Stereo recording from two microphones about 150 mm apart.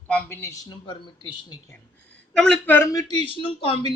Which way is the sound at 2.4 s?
10° left (ahead or behind).